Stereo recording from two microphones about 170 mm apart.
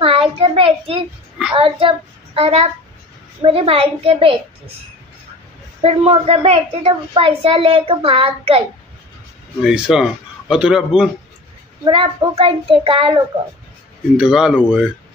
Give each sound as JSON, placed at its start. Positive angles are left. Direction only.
{"t": 0.0, "sound": "a sound", "side_deg": -30}
{"t": 1.5, "sound": "a child's voice", "side_deg": -30}
{"t": 5.8, "sound": "a child's voice", "side_deg": -35}
{"t": 9.7, "sound": "a man's voice", "side_deg": -5}
{"t": 11.8, "sound": "a child's voice", "side_deg": -30}
{"t": 14.1, "sound": "a man's voice", "side_deg": -5}